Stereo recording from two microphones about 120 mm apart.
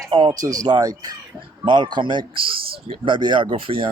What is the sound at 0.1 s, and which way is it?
Speech, 35° right (ahead or behind).